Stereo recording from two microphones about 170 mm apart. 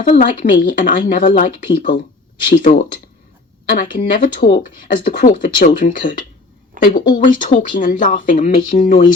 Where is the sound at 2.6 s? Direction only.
50° left (ahead or behind).